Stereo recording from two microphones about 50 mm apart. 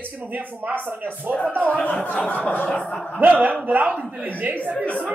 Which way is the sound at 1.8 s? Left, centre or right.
Left.